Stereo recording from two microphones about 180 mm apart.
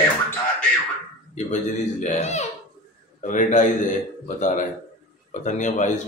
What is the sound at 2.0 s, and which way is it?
Speech, 40° left (ahead or behind).